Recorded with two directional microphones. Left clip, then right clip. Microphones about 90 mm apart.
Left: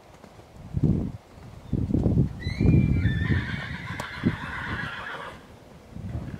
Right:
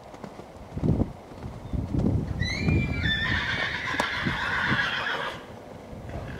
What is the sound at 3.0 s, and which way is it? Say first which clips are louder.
Neigh: right 5 dB; 15° right (ahead or behind).